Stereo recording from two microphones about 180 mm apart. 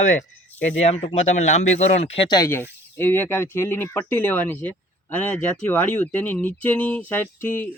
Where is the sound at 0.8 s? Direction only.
35° left (ahead or behind).